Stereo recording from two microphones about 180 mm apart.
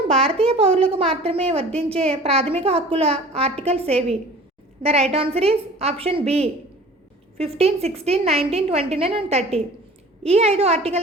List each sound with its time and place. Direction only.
0.1 s a woman's voice: 30° right (ahead or behind)